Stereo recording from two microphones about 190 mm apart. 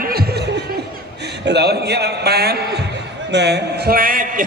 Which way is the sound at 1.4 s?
60° right (ahead or behind).